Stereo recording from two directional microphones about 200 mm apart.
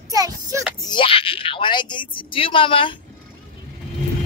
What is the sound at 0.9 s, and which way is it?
Speech, 25° left (ahead or behind).